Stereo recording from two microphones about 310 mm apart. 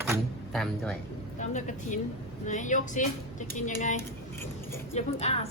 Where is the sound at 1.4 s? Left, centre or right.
Left.